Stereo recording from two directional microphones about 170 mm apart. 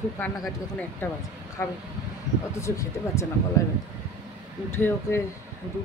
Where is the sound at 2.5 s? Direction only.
15° left (ahead or behind).